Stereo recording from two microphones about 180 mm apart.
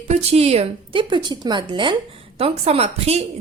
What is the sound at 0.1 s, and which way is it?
A woman's voice, 35° right (ahead or behind).